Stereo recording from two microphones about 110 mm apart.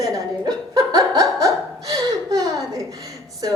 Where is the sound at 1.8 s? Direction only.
30° right (ahead or behind).